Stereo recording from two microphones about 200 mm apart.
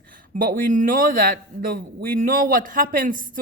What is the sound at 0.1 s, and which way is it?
A woman's voice, 45° right (ahead or behind).